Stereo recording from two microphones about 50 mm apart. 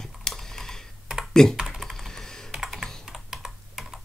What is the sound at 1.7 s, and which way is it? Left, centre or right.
Computer keyboard, centre.